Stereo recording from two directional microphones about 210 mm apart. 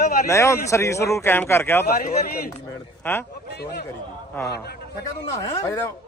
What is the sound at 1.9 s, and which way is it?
Speech, 45° left (ahead or behind).